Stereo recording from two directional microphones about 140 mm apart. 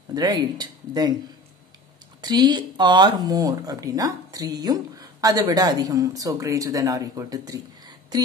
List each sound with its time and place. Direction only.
0.1 s speech: 30° right (ahead or behind)
2.2 s speech: 30° right (ahead or behind)